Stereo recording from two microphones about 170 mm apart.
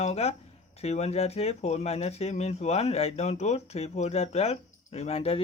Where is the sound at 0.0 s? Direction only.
40° left (ahead or behind).